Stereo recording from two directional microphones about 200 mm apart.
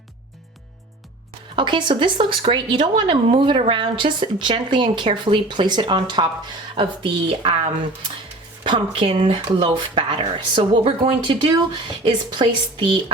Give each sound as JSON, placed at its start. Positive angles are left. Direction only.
{"t": 1.5, "sound": "a woman's voice", "side_deg": -25}
{"t": 8.6, "sound": "a woman's voice", "side_deg": -25}